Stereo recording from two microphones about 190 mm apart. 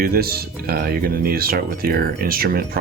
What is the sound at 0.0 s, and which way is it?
Speech, 50° right (ahead or behind).